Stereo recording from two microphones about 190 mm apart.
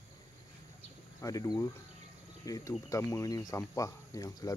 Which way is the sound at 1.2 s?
20° left (ahead or behind).